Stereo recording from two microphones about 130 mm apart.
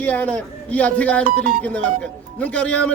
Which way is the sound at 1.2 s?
90° right.